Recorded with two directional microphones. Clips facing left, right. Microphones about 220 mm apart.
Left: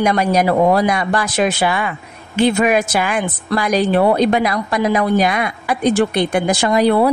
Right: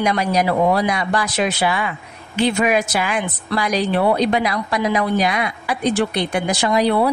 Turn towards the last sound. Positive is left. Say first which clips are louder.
# left 3 dB
turn(degrees=50)  # may be behind; listen again after turning